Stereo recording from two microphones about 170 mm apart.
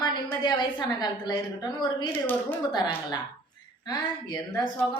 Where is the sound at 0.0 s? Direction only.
25° left (ahead or behind).